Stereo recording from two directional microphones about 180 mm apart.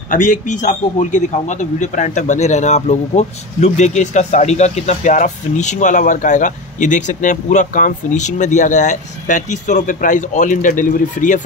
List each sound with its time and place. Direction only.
0.1 s a man's voice: 45° left (ahead or behind)